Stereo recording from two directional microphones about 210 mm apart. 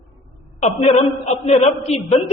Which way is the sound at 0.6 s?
30° left (ahead or behind).